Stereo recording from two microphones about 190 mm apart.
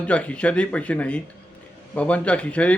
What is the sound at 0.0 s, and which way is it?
A man's voice, 5° left (ahead or behind).